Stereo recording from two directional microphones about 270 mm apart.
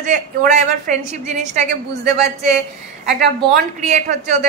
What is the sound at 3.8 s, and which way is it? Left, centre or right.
Speech, right.